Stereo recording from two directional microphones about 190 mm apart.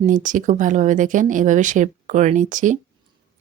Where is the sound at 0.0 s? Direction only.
40° right (ahead or behind).